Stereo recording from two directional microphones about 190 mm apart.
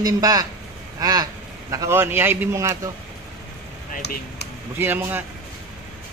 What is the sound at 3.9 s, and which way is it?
Speech, 55° left (ahead or behind).